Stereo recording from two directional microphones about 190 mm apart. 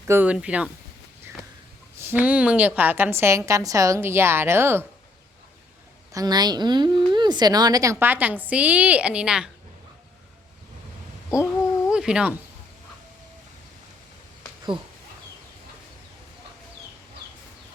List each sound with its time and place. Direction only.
0.1 s a woman's voice: 10° right (ahead or behind)
2.1 s a woman's voice: 5° right (ahead or behind)
6.1 s a woman's voice: 20° right (ahead or behind); by 9.5 s 5° right (ahead or behind)
11.9 s a sound: 5° right (ahead or behind)